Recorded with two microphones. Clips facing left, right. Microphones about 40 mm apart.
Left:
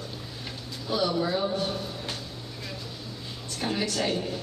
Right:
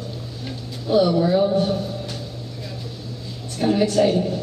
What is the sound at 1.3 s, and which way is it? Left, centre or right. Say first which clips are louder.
Speech: right 9 dB; centre.